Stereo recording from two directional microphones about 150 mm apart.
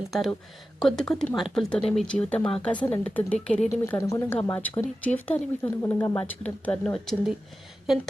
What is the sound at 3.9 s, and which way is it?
Speech, 20° left (ahead or behind).